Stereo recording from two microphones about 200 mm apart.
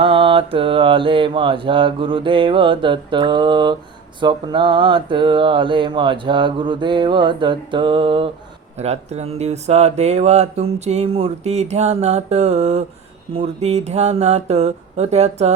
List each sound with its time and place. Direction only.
0.0 s speech: 25° right (ahead or behind)